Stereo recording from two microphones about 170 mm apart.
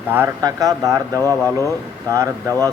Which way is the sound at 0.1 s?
15° right (ahead or behind).